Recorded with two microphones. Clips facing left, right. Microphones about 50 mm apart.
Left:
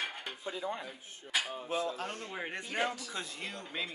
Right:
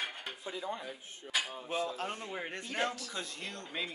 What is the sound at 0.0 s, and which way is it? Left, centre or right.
Dishes, centre.